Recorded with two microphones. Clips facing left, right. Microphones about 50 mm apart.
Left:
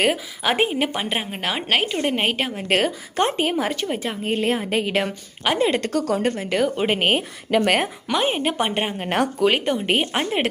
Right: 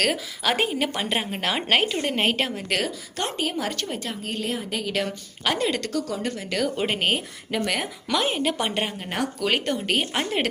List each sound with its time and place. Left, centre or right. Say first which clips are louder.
0.0 s a woman's voice: left 3 dB; centre
2.6 s a woman's voice: left 6 dB; left
3.7 s a woman's voice: left 5 dB; centre; by 5.0 s left
5.4 s a woman's voice: left 4 dB; centre
5.9 s speech: left 6 dB; left
6.5 s a woman's voice: left 3 dB; left
7.5 s speech: left 7 dB; left
8.0 s a woman's voice: left 2 dB; left
9.0 s speech: left 6 dB; left
9.4 s a woman's voice: left 5 dB; centre